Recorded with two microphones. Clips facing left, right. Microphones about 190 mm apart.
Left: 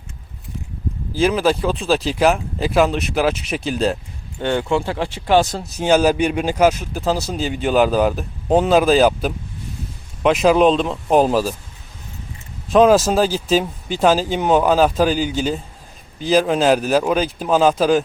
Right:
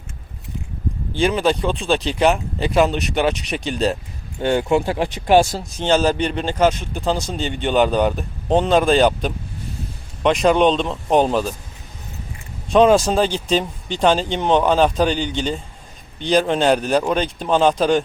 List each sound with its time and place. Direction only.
1.1 s speech: centre (ahead or behind)
4.4 s speech: 15° right (ahead or behind)
5.7 s speech: 10° left (ahead or behind)
12.7 s speech: centre (ahead or behind)